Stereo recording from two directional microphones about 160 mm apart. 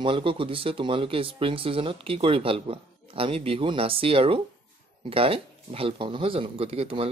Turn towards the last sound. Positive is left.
turn(degrees=-35)  # may be behind; listen again after turning